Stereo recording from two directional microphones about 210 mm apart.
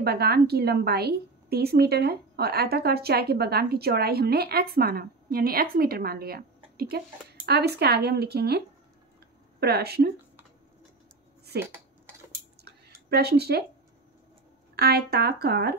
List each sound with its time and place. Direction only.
0.0 s a woman's voice: 50° right (ahead or behind)
11.5 s a woman's voice: 50° right (ahead or behind)
12.8 s speech: 50° right (ahead or behind)
14.8 s a woman's voice: 50° right (ahead or behind)